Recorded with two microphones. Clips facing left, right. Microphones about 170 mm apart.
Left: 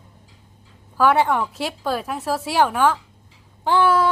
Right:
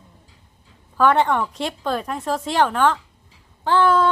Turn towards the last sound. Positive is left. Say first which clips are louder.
# right 1 dB
turn(degrees=10)  # may be behind; listen again after turning